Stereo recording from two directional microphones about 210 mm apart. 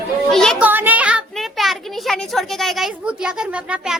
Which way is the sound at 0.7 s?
10° right (ahead or behind).